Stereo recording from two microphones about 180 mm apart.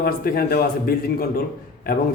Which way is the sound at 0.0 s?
60° left (ahead or behind).